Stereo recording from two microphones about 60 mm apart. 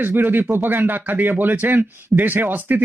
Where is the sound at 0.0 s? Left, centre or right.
Right.